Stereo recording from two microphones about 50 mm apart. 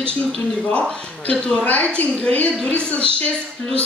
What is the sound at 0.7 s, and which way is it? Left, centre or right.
A woman's voice, left.